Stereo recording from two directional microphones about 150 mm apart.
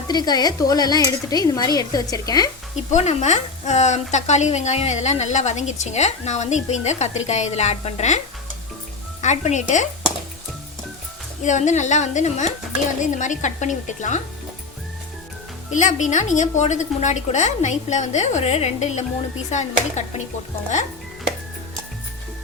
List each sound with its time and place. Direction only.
0.1 s speech: 25° left (ahead or behind)
2.9 s a woman's voice: 50° left (ahead or behind)
9.2 s a woman's voice: 50° left (ahead or behind)
11.4 s a woman's voice: 55° left (ahead or behind)
15.7 s a woman's voice: 55° left (ahead or behind)